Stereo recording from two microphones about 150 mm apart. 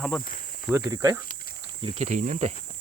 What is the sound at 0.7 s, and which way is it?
Speech, 25° right (ahead or behind).